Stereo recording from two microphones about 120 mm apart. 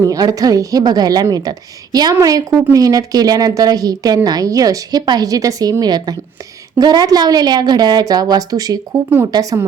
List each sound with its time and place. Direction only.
0.0 s a woman's voice: 30° right (ahead or behind)
8.9 s speech: 20° right (ahead or behind)
9.2 s speech: 30° right (ahead or behind)